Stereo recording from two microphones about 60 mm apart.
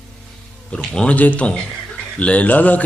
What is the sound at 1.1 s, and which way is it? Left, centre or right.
A man's voice, left.